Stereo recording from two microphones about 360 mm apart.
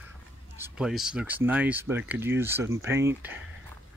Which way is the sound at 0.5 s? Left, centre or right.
Centre.